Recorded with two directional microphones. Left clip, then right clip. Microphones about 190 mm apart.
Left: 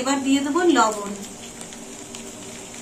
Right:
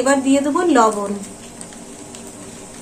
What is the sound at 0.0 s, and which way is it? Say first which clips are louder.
Speech: right 6 dB; 55° right (ahead or behind).